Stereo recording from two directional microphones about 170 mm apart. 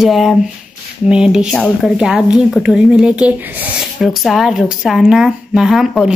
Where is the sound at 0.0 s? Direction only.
Centre (ahead or behind).